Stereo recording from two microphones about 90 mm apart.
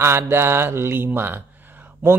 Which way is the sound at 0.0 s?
25° right (ahead or behind).